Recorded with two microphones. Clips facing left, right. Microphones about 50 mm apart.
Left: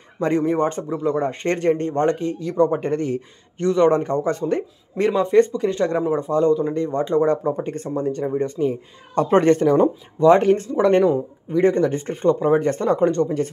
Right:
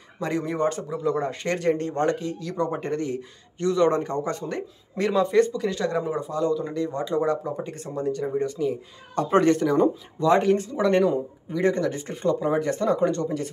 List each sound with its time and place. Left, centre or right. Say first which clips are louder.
0.4 s speech: left 5 dB; left